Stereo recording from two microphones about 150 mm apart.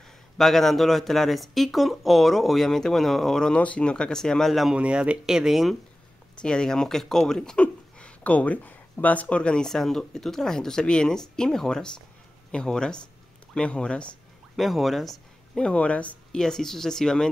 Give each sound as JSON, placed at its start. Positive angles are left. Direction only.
{"t": 0.4, "sound": "speech", "side_deg": 0}